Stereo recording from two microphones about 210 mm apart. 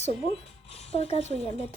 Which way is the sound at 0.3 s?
30° left (ahead or behind).